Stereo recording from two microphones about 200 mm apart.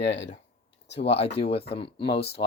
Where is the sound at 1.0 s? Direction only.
30° left (ahead or behind).